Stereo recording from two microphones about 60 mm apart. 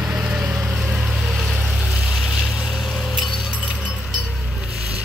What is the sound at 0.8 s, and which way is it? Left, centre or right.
Vehicle, centre.